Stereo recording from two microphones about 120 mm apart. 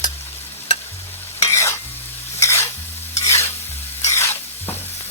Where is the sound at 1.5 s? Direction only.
20° left (ahead or behind).